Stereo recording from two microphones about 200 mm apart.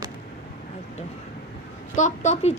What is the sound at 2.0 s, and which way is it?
Speech, 40° left (ahead or behind).